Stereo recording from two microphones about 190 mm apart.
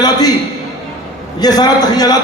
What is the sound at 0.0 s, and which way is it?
Speech, 20° left (ahead or behind).